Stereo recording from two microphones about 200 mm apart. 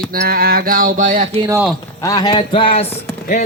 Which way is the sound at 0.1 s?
50° right (ahead or behind).